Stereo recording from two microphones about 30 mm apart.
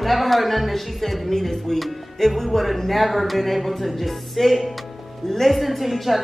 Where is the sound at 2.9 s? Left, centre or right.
Centre.